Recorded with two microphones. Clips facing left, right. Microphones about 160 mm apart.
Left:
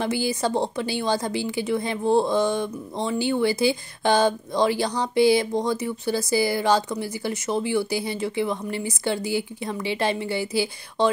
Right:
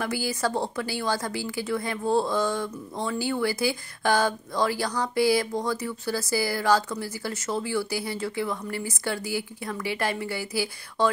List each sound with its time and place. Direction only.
0.0 s a woman's voice: 20° left (ahead or behind)